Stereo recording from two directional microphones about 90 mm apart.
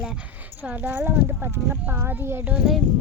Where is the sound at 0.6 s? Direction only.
20° right (ahead or behind).